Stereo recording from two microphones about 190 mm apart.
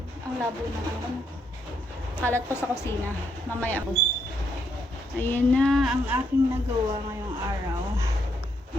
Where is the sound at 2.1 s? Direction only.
10° left (ahead or behind).